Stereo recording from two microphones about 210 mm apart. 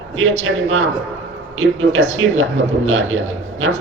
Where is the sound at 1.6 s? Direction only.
70° right (ahead or behind).